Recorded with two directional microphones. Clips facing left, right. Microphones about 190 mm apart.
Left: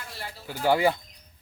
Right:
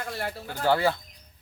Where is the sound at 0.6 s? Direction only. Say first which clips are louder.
Left 1 dB; 15° left (ahead or behind).